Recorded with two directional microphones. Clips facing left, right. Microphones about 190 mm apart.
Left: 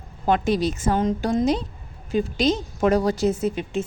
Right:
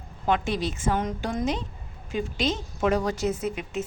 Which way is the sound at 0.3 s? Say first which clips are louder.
Left 5 dB; 40° left (ahead or behind).